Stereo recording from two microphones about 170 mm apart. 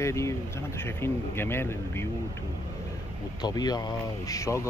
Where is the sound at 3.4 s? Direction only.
25° left (ahead or behind).